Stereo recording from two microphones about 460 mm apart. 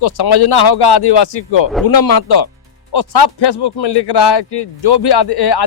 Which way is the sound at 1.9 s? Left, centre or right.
Left.